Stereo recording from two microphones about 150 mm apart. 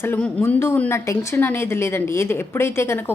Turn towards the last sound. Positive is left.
turn(degrees=15)  # may be behind; listen again after turning